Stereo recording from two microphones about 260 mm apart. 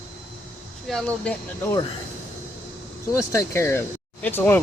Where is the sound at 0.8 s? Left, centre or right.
Centre.